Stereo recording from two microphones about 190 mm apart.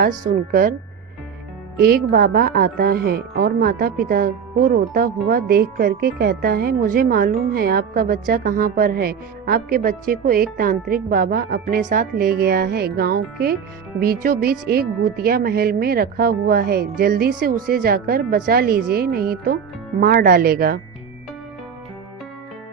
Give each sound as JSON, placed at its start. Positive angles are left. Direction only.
{"t": 0.0, "sound": "a woman's voice", "side_deg": -45}
{"t": 1.8, "sound": "a woman's voice", "side_deg": -50}